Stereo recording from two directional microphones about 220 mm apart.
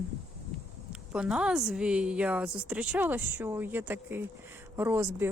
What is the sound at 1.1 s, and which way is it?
A woman's voice, 5° right (ahead or behind).